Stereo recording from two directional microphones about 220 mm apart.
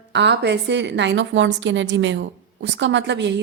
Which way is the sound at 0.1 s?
50° right (ahead or behind).